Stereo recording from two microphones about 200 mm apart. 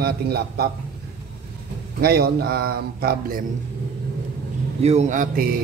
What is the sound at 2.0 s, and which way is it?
Speech, 50° right (ahead or behind).